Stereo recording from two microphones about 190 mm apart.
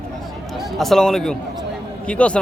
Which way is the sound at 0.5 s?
Centre (ahead or behind).